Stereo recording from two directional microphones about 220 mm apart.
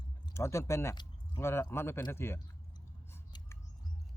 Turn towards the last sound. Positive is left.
turn(degrees=10)  # may be behind; listen again after turning